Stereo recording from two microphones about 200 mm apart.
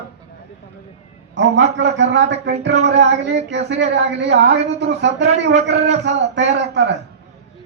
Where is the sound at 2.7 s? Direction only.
35° right (ahead or behind).